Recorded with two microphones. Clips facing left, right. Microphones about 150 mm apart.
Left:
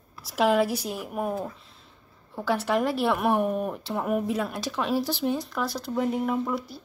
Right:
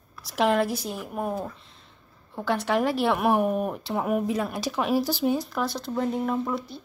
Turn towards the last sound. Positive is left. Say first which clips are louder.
# even
turn(degrees=5)  # may be behind; listen again after turning